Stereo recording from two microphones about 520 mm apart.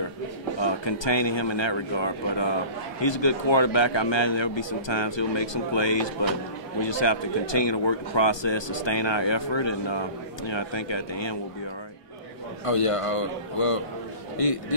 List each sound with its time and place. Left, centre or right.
0.6 s speech: left
12.6 s a man's voice: left